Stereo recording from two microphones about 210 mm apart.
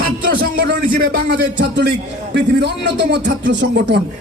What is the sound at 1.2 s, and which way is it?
Speech, 55° right (ahead or behind).